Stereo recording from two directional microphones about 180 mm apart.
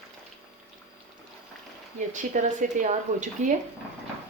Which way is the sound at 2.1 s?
45° right (ahead or behind).